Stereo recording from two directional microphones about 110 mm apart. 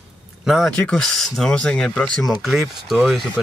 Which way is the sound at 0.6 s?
10° left (ahead or behind).